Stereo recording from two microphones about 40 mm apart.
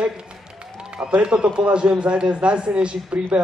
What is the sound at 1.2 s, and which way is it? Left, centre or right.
A man's voice, right.